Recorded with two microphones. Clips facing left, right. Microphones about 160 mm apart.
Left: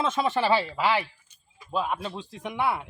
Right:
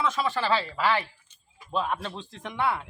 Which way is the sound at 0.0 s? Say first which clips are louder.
Left 2 dB; 20° left (ahead or behind).